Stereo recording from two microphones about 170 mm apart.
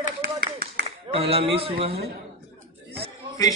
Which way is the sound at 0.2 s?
65° right (ahead or behind).